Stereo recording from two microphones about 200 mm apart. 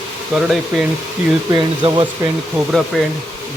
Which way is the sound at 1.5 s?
20° right (ahead or behind).